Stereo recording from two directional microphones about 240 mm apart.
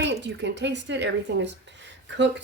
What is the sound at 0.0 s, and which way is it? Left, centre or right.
A woman's voice, right.